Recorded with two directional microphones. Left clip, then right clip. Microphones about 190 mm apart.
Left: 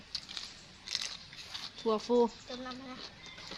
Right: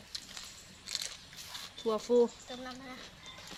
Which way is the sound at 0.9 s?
25° left (ahead or behind).